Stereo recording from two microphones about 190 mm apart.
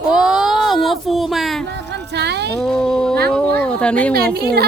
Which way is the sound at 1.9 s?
60° right (ahead or behind).